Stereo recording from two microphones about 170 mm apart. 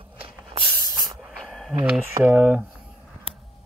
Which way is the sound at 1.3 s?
Centre (ahead or behind).